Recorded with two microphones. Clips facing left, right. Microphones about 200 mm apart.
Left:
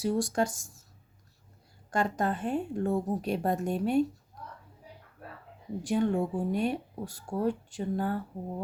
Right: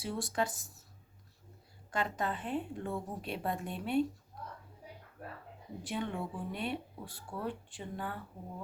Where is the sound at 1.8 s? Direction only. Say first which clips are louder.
Left 6 dB; 45° left (ahead or behind).